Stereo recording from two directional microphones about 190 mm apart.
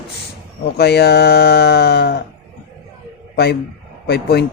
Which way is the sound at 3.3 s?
60° left (ahead or behind).